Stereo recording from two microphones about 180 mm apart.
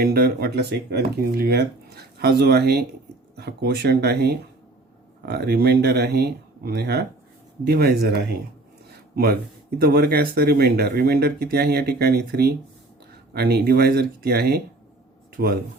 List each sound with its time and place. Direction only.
0.0 s speech: 55° right (ahead or behind)